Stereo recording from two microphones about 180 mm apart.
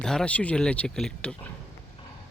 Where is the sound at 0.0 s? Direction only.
5° left (ahead or behind).